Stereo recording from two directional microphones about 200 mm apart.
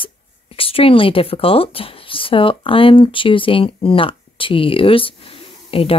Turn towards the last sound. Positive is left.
turn(degrees=30)  # may be behind; listen again after turning